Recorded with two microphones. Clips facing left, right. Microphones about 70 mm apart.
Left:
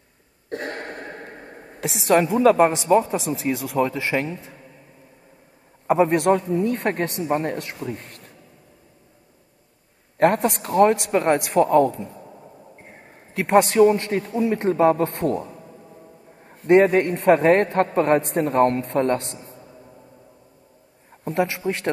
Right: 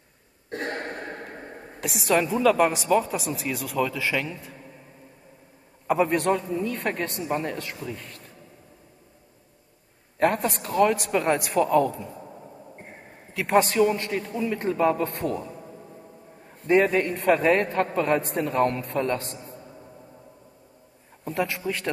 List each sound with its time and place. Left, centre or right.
1.9 s a man's voice: left
2.5 s a man's voice: left
5.9 s a man's voice: left
6.2 s a man's voice: left
10.1 s a man's voice: left
13.5 s a man's voice: left
16.6 s a man's voice: left
21.5 s speech: left